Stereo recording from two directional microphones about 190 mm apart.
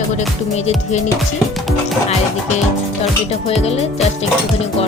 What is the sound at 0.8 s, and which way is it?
Speech, 40° left (ahead or behind).